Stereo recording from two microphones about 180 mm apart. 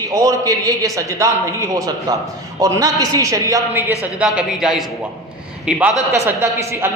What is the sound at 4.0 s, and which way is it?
Speech, 5° right (ahead or behind).